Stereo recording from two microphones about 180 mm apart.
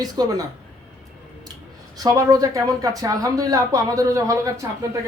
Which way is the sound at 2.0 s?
20° right (ahead or behind).